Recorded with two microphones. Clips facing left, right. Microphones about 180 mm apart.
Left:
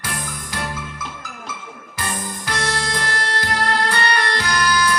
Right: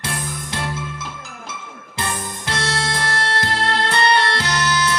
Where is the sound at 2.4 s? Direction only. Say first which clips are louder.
Right 1 dB; 25° right (ahead or behind).